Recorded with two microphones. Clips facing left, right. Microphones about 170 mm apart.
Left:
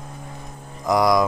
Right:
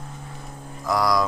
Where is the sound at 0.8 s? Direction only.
20° left (ahead or behind).